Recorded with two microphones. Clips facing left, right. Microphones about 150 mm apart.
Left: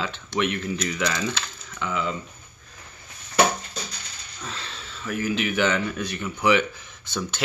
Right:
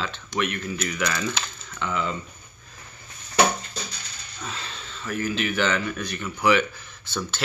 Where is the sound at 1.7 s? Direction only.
5° left (ahead or behind).